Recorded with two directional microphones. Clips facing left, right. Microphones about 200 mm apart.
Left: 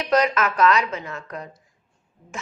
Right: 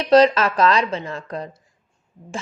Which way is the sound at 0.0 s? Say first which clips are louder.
Right 6 dB; 30° right (ahead or behind).